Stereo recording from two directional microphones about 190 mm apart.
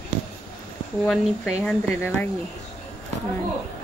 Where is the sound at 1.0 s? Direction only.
Centre (ahead or behind).